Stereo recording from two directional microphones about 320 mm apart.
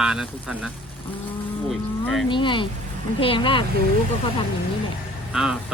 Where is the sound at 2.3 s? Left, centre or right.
Centre.